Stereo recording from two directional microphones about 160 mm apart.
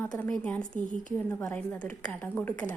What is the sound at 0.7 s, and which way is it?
Speech, 50° left (ahead or behind).